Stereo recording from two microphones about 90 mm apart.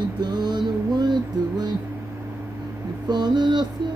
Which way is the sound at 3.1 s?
55° right (ahead or behind).